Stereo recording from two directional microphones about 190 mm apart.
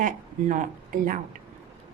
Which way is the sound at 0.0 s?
40° right (ahead or behind).